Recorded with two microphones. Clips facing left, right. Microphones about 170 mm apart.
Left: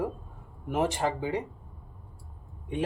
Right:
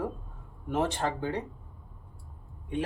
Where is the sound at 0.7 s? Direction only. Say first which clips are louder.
Left 1 dB; 10° left (ahead or behind).